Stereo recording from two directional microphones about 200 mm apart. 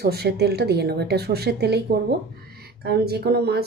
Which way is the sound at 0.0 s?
50° right (ahead or behind).